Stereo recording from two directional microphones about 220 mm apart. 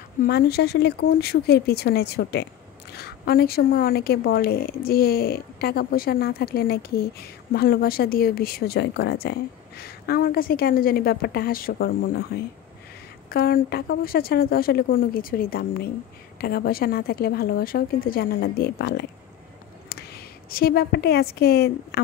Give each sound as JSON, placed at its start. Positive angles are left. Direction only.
{"t": 0.2, "sound": "a woman's voice", "side_deg": 45}
{"t": 13.3, "sound": "a woman's voice", "side_deg": 40}